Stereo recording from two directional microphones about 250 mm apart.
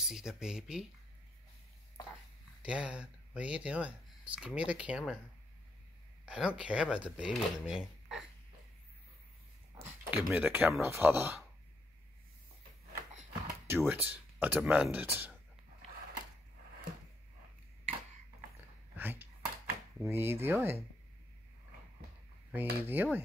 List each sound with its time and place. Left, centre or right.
0.0 s speech: centre
2.6 s speech: centre
6.2 s speech: centre
9.8 s speech: centre
12.9 s a sound: right
13.7 s speech: centre
18.9 s a sound: centre
22.5 s speech: centre